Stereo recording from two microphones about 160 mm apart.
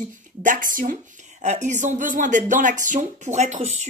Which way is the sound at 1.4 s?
45° right (ahead or behind).